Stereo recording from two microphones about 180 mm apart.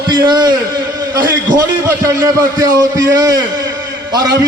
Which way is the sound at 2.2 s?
20° right (ahead or behind).